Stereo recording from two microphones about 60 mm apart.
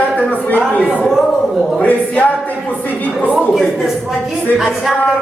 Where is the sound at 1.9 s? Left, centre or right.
Left.